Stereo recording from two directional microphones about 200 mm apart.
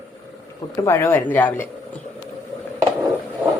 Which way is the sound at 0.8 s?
15° left (ahead or behind).